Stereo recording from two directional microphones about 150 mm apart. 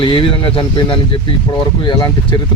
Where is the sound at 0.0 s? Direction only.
35° left (ahead or behind).